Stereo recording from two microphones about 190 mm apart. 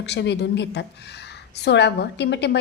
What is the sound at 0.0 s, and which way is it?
Speech, 65° left (ahead or behind).